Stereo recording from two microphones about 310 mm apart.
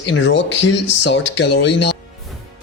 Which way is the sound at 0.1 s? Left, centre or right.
Left.